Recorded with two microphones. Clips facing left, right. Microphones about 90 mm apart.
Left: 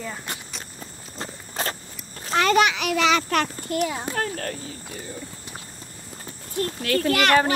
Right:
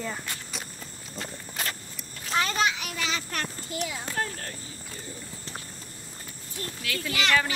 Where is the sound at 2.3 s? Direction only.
75° left (ahead or behind).